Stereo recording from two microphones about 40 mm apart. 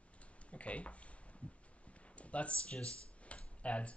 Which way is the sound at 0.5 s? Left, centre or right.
Left.